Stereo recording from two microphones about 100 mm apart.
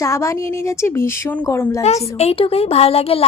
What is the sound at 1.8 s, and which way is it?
A woman's voice, 90° left.